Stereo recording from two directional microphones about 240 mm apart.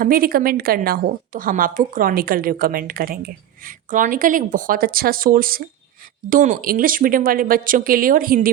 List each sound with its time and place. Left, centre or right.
0.0 s a woman's voice: right